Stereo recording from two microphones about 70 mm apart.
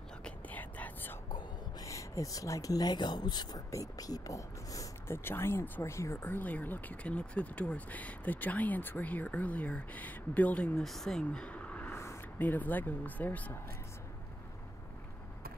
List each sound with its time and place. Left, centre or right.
0.2 s whispering: left
1.9 s speech: left
3.7 s speech: left
5.0 s speech: left
6.2 s speech: left
10.8 s speech: centre; by 11.9 s left
11.9 s a sound: left
12.4 s speech: left